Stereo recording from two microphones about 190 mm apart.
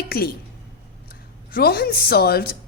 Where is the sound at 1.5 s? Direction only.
55° left (ahead or behind).